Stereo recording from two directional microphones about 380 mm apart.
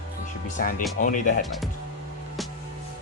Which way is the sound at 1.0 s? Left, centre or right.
Left.